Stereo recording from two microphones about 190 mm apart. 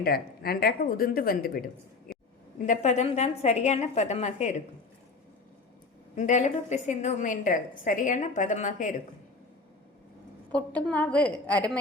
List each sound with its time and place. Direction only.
0.0 s a woman's voice: 55° left (ahead or behind)
2.6 s a woman's voice: 40° left (ahead or behind)
6.1 s a woman's voice: 40° left (ahead or behind)
10.5 s a woman's voice: 5° left (ahead or behind)